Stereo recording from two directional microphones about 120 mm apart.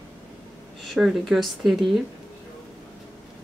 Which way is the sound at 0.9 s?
Centre (ahead or behind).